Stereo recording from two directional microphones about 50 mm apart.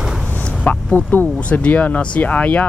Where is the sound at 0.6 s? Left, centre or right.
Left.